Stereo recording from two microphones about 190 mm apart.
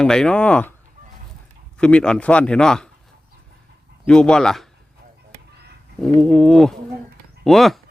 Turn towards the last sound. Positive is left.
turn(degrees=0)  # may be behind; listen again after turning